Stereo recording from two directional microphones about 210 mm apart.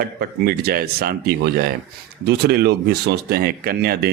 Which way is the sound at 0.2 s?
45° right (ahead or behind).